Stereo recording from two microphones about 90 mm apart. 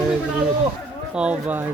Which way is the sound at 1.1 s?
15° right (ahead or behind).